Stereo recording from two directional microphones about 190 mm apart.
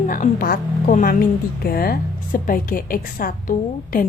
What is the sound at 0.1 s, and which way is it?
A woman's voice, 45° left (ahead or behind).